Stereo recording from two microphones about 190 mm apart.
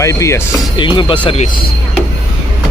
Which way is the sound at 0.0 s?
15° left (ahead or behind).